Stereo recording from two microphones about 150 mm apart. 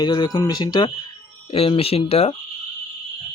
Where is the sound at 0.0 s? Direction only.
30° left (ahead or behind).